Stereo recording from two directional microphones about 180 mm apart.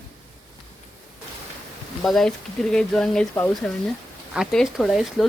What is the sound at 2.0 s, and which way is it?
Speech, centre (ahead or behind).